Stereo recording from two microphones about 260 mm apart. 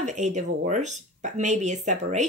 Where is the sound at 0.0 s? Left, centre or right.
Right.